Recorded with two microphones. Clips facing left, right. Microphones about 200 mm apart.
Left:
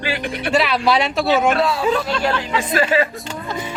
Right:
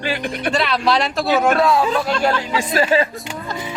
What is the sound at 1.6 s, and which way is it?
Speech, 50° right (ahead or behind).